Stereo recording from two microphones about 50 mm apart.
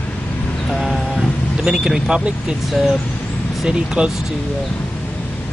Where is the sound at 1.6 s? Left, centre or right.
Centre.